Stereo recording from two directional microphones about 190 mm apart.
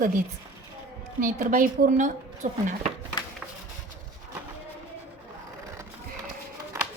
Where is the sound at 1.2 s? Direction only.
45° right (ahead or behind).